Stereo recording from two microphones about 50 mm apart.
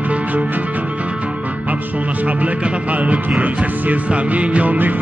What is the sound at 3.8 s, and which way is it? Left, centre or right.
Music, right.